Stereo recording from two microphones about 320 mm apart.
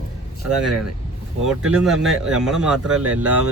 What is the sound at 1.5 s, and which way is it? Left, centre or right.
Speech, centre.